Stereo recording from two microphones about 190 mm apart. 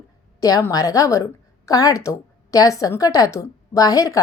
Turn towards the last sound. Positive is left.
turn(degrees=20)  # may be behind; listen again after turning